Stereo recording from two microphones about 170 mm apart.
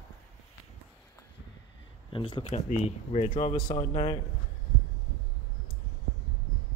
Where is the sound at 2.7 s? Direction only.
40° left (ahead or behind).